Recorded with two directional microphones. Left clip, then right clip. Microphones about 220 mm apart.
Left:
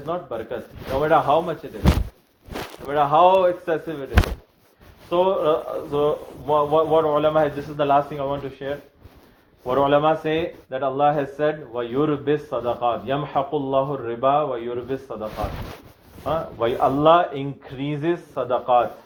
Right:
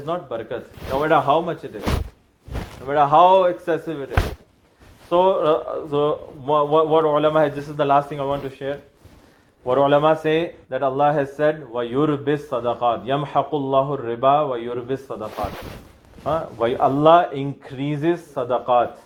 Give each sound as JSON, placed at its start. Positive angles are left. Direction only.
{"t": 0.0, "sound": "speech", "side_deg": -50}
{"t": 2.8, "sound": "speech", "side_deg": -50}
{"t": 5.0, "sound": "speech", "side_deg": -50}